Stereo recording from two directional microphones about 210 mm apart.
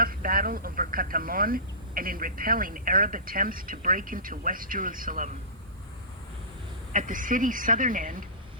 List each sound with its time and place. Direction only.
0.0 s speech: 45° right (ahead or behind)
6.9 s a woman's voice: 40° right (ahead or behind)